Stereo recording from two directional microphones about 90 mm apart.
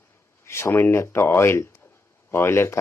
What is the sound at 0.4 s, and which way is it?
A man's voice, 30° left (ahead or behind).